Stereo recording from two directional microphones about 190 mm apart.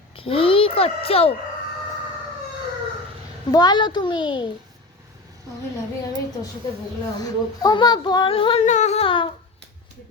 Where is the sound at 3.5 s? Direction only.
20° left (ahead or behind).